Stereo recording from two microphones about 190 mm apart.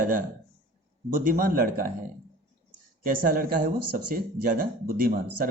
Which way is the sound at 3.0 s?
50° right (ahead or behind).